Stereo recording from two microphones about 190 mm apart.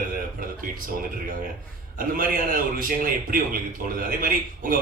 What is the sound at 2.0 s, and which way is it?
A man's voice, 50° right (ahead or behind).